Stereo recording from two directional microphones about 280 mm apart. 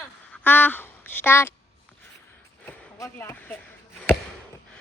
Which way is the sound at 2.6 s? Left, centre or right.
Centre.